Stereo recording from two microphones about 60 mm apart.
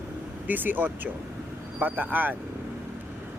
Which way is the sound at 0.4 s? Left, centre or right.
Right.